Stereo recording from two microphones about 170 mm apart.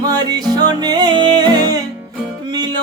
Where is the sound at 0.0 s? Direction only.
25° right (ahead or behind).